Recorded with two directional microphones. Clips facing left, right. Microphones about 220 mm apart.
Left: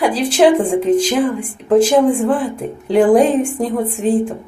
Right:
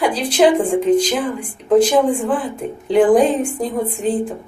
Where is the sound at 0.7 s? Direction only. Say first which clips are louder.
Left 1 dB; 5° left (ahead or behind).